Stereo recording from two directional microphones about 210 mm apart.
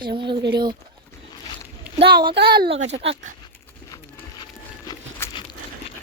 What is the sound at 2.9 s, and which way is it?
Speech, 30° right (ahead or behind).